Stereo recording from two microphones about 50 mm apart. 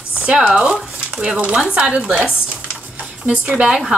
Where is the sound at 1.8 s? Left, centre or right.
Right.